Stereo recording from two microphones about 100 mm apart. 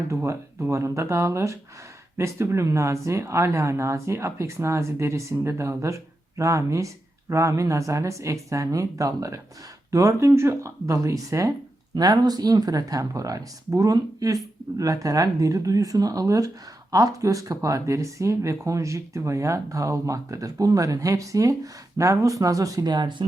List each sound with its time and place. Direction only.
0.1 s speech: 25° right (ahead or behind); by 23.2 s 50° right (ahead or behind)